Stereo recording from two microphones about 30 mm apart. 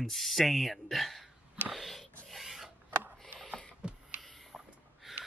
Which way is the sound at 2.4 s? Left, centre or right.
Centre.